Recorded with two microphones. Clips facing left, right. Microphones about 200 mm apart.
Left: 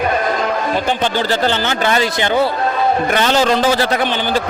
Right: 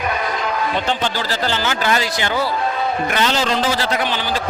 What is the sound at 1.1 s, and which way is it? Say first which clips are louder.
Speech: left 5 dB; 60° left (ahead or behind).